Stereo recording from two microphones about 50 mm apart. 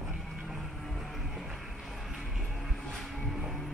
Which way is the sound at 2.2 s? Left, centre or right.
Centre.